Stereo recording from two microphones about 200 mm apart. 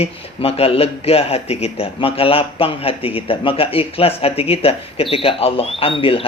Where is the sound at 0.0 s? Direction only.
30° left (ahead or behind).